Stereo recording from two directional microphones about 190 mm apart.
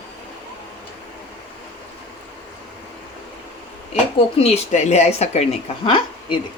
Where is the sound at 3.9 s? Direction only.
30° left (ahead or behind).